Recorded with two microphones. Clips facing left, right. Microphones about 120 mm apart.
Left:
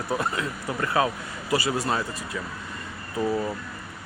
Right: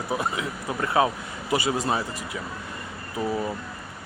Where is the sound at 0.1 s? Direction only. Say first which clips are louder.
Left 1 dB; 15° right (ahead or behind).